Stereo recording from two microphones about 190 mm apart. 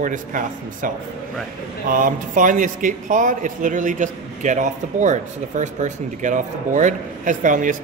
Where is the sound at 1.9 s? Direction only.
45° right (ahead or behind).